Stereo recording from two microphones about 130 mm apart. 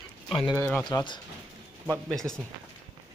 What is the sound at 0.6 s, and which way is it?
Speech, 15° left (ahead or behind).